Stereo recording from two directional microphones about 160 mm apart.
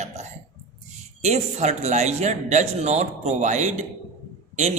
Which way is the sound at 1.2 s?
45° right (ahead or behind).